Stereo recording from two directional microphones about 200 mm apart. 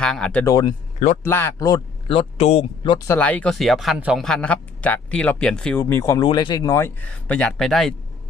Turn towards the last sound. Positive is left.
turn(degrees=0)  # may be behind; listen again after turning